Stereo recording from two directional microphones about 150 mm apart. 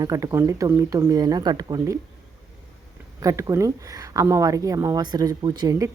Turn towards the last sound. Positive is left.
turn(degrees=-25)  # may be behind; listen again after turning